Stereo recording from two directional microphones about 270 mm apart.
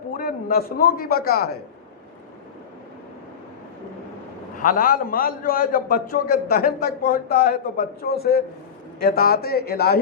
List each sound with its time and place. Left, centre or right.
0.2 s a man's voice: left
4.6 s a man's voice: left